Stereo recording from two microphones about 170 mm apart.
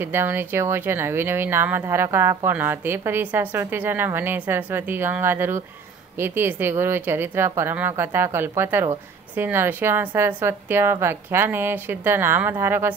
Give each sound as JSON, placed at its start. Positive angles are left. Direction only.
{"t": 0.0, "sound": "speech", "side_deg": -15}